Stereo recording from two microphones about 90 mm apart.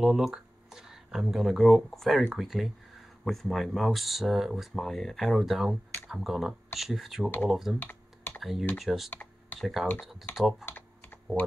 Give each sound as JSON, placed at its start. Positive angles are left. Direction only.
{"t": 0.0, "sound": "speech", "side_deg": -5}
{"t": 7.8, "sound": "computer keyboard", "side_deg": 20}
{"t": 8.4, "sound": "speech", "side_deg": 0}
{"t": 9.1, "sound": "computer keyboard", "side_deg": 20}
{"t": 9.6, "sound": "speech", "side_deg": 0}